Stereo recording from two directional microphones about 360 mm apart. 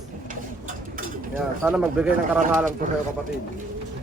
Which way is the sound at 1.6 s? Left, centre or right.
Centre.